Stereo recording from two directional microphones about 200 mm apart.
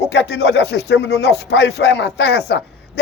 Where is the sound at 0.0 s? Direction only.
60° left (ahead or behind).